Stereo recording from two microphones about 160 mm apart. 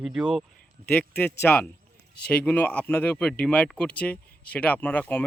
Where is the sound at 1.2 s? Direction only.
15° left (ahead or behind).